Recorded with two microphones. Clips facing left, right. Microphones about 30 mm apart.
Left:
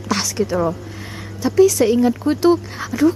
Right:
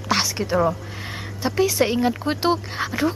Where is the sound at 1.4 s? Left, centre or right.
Right.